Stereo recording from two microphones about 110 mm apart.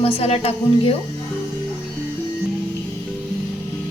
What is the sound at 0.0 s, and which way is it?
Speech, 65° left (ahead or behind).